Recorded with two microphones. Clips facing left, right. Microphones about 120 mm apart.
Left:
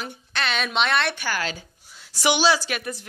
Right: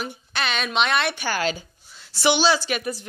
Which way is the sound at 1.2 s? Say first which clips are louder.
Right 3 dB; 25° right (ahead or behind).